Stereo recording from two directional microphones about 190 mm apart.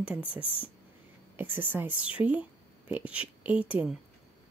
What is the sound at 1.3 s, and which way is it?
Speech, 10° right (ahead or behind).